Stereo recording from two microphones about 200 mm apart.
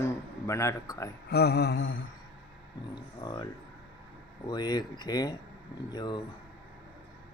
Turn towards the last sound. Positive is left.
turn(degrees=20)  # may be behind; listen again after turning